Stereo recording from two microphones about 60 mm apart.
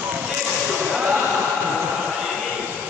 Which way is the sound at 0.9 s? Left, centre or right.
Centre.